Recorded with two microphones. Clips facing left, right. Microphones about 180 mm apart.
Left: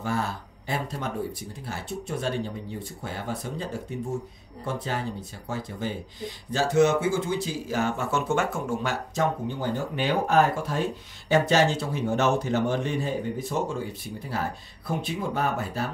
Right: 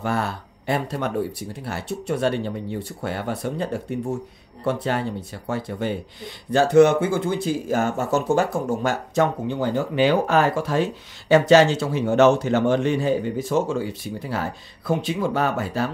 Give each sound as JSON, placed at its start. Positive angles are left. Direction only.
{"t": 0.0, "sound": "speech", "side_deg": -65}
{"t": 9.1, "sound": "speech", "side_deg": -80}